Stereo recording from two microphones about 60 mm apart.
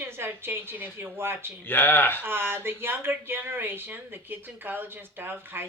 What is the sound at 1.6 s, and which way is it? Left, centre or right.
Speech, left.